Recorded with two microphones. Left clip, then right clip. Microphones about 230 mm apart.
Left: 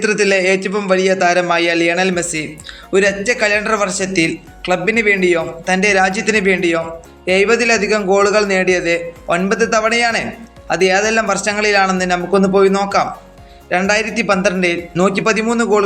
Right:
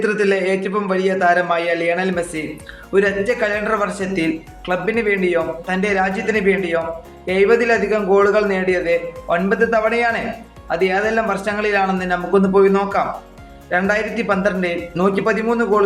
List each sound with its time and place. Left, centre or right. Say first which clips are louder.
0.0 s speech: left 3 dB; left